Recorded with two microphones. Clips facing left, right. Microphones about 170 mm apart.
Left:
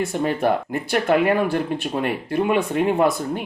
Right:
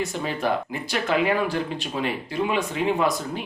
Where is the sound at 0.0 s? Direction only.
55° left (ahead or behind).